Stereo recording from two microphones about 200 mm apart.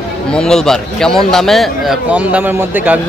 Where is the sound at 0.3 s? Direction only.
5° left (ahead or behind).